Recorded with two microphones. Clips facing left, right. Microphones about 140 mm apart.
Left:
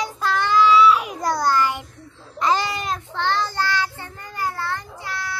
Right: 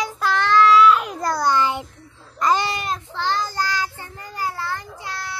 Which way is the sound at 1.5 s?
20° right (ahead or behind).